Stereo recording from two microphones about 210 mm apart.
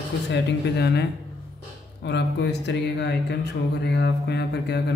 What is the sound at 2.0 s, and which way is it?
Speech, 55° left (ahead or behind).